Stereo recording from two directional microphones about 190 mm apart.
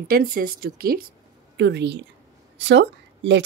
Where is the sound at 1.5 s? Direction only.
65° right (ahead or behind).